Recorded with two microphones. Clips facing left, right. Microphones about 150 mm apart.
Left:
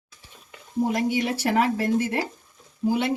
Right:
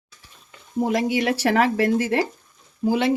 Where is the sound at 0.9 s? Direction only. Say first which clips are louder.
Right 5 dB; 90° right.